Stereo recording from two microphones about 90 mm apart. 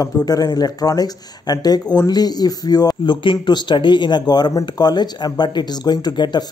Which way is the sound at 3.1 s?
65° left (ahead or behind).